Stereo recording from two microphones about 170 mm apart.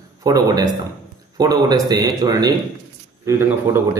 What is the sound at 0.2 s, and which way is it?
Speech, 20° right (ahead or behind).